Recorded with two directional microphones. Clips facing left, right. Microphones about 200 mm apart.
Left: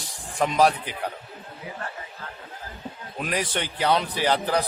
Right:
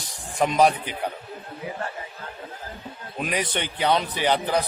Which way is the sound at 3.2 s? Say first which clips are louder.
Right 1 dB; centre (ahead or behind).